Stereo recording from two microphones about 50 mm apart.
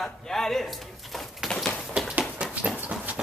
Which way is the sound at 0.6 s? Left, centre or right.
Centre.